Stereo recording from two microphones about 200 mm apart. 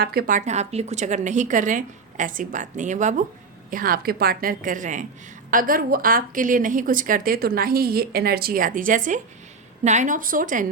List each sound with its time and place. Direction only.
0.0 s a woman's voice: 50° right (ahead or behind)